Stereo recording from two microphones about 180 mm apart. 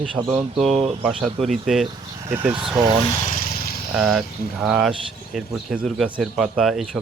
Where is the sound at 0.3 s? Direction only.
Centre (ahead or behind).